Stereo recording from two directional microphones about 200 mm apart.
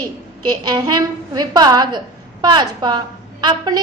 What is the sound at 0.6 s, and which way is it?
A woman's voice, 20° right (ahead or behind).